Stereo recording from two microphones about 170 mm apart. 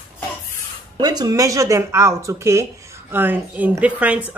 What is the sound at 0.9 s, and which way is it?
Speech, 25° right (ahead or behind).